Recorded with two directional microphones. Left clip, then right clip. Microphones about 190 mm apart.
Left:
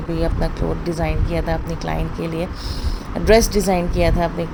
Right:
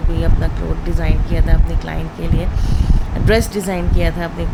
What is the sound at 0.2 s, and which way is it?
Speech, 15° left (ahead or behind).